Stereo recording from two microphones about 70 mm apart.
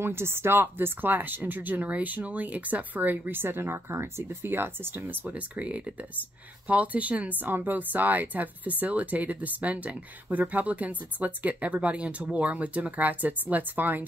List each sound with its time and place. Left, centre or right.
0.0 s speech: right